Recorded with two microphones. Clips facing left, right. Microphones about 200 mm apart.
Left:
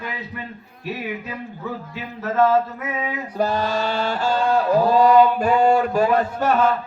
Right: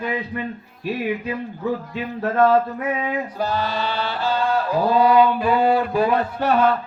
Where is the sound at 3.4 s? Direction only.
45° left (ahead or behind).